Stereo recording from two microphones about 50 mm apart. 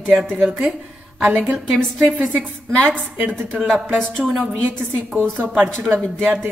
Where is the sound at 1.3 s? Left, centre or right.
Right.